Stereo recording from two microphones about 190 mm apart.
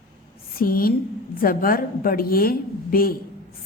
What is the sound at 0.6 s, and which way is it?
A woman's voice, 50° left (ahead or behind).